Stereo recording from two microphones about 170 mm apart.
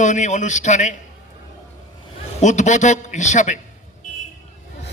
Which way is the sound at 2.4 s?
45° left (ahead or behind).